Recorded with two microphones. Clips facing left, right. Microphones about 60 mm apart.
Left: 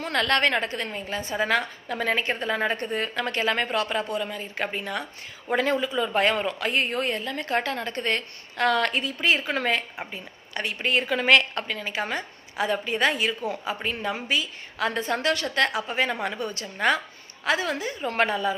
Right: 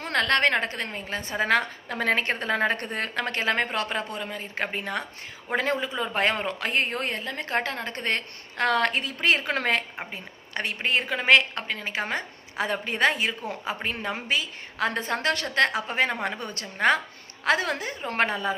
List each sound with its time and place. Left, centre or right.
0.0 s a woman's voice: right
10.0 s a woman's voice: right